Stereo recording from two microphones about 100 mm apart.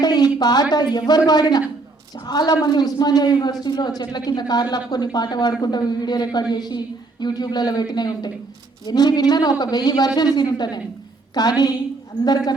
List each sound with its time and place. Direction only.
0.0 s a man's voice: 45° left (ahead or behind)